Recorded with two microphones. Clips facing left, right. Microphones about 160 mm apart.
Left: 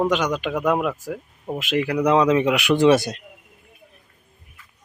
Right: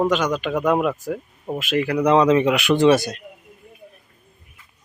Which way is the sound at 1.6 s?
15° left (ahead or behind).